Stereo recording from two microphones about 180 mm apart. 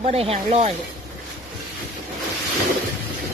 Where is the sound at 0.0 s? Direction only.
35° right (ahead or behind).